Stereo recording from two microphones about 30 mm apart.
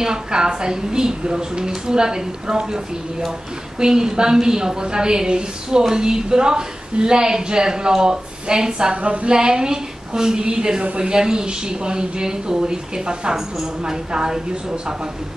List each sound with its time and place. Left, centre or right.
0.0 s a woman's voice: right
3.8 s a woman's voice: right
8.9 s a woman's voice: right
9.3 s a woman's voice: right